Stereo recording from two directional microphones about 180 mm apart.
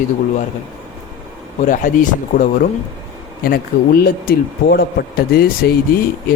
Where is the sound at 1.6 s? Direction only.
45° left (ahead or behind).